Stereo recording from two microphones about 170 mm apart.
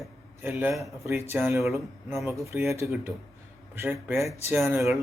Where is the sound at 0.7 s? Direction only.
Centre (ahead or behind).